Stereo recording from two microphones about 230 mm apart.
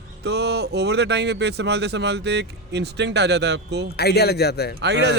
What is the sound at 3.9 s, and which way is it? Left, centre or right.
Speech, left.